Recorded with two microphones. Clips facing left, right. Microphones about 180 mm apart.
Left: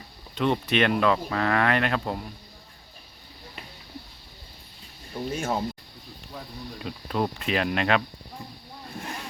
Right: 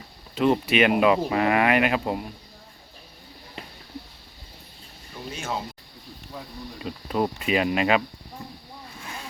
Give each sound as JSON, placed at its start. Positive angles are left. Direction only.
{"t": 0.3, "sound": "speech", "side_deg": -5}
{"t": 5.3, "sound": "speech", "side_deg": 50}
{"t": 6.7, "sound": "speech", "side_deg": 0}